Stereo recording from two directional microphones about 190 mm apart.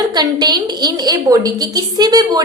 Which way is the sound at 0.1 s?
20° right (ahead or behind).